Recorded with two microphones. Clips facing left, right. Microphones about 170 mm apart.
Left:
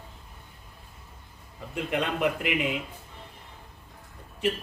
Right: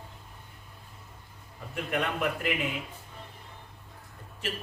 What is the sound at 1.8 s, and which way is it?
Speech, 20° left (ahead or behind).